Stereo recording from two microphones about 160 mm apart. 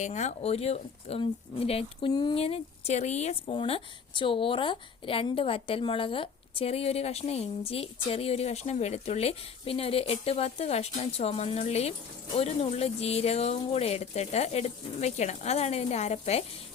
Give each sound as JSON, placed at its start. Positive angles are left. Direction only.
{"t": 0.0, "sound": "a woman's voice", "side_deg": 45}